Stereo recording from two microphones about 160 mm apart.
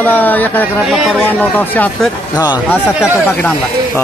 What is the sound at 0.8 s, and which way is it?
Speech, centre (ahead or behind).